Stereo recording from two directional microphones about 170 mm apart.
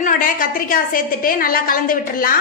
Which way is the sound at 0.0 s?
55° left (ahead or behind).